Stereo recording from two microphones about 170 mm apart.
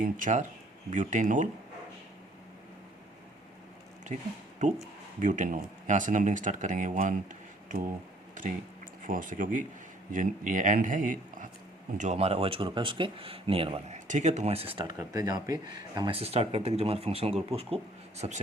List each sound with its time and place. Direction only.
0.0 s speech: 50° right (ahead or behind)
5.2 s speech: 50° right (ahead or behind)
8.4 s speech: 50° right (ahead or behind)
11.9 s speech: 40° right (ahead or behind); by 15.5 s 20° right (ahead or behind)
16.0 s speech: 30° right (ahead or behind)